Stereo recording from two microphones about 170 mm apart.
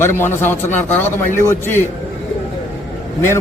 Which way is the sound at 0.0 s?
15° left (ahead or behind).